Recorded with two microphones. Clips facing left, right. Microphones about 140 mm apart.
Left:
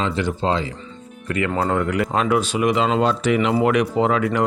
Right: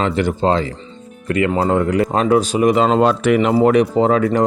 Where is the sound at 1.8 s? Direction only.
35° right (ahead or behind); by 3.5 s 55° right (ahead or behind).